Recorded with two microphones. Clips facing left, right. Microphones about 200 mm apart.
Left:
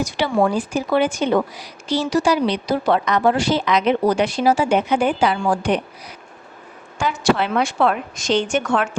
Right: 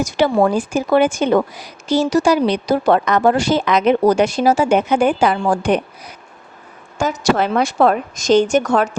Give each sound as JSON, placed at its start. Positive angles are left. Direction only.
{"t": 0.0, "sound": "a woman's voice", "side_deg": -45}
{"t": 7.0, "sound": "a woman's voice", "side_deg": -45}